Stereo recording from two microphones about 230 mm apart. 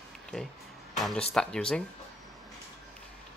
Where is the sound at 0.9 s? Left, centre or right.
Centre.